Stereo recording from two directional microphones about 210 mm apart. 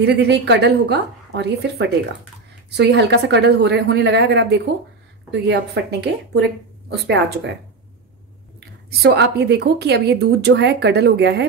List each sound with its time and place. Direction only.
0.0 s a woman's voice: 55° right (ahead or behind)
8.5 s a woman's voice: 55° right (ahead or behind)